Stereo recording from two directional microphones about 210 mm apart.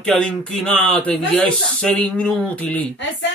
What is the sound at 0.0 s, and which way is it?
Speech, 5° left (ahead or behind).